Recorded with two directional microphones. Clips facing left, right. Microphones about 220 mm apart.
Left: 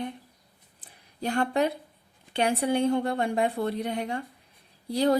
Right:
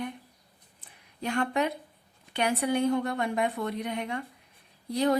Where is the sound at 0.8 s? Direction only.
35° left (ahead or behind).